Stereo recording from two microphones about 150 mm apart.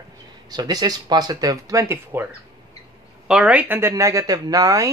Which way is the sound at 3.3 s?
5° right (ahead or behind).